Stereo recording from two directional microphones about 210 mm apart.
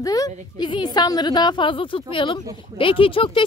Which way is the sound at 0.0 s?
15° left (ahead or behind).